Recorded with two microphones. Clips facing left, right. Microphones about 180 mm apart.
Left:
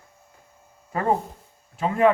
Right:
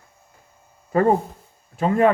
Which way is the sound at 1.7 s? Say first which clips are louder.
Right 3 dB; 45° right (ahead or behind).